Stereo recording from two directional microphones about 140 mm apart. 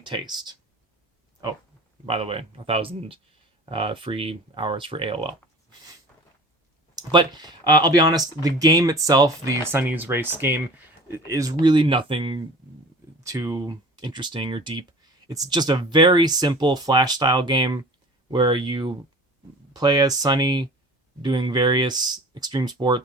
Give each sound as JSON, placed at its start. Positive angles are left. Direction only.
{"t": 0.0, "sound": "speech", "side_deg": -30}
{"t": 1.4, "sound": "a sound", "side_deg": -30}
{"t": 2.0, "sound": "speech", "side_deg": -45}
{"t": 6.9, "sound": "speech", "side_deg": -30}
{"t": 11.6, "sound": "speech", "side_deg": -35}
{"t": 13.2, "sound": "speech", "side_deg": -25}